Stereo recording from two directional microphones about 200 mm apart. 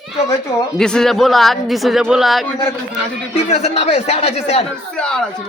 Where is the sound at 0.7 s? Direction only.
5° left (ahead or behind).